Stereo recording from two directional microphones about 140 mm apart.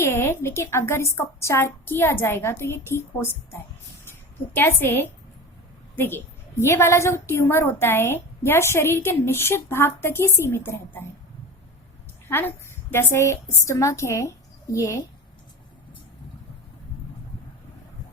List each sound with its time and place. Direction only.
0.0 s a woman's voice: 15° left (ahead or behind)
12.9 s speech: 15° left (ahead or behind)